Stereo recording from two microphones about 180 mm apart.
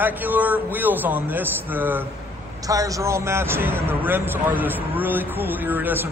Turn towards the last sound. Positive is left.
turn(degrees=-10)  # may be behind; listen again after turning